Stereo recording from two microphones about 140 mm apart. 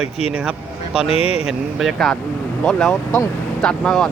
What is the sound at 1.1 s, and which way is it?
Speech, 45° left (ahead or behind).